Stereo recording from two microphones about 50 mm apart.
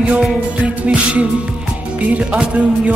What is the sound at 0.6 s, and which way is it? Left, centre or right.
Music, right.